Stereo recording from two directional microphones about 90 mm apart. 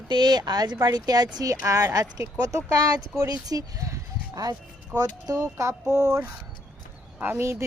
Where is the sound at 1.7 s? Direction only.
40° right (ahead or behind).